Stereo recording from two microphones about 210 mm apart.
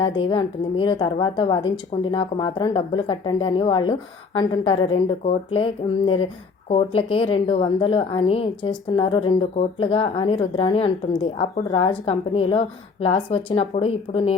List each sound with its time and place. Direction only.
0.0 s speech: 20° left (ahead or behind)